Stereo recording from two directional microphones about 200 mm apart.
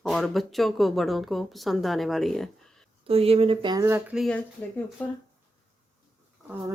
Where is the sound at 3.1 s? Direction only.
30° right (ahead or behind); by 4.2 s 15° right (ahead or behind).